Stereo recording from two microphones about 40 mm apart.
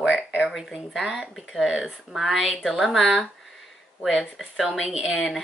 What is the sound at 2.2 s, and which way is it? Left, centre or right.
Speech, centre.